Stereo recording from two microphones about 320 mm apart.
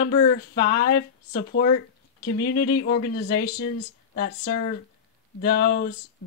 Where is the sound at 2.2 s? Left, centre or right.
Left.